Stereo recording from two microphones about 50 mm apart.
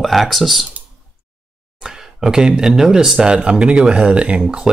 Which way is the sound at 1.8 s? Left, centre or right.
Centre.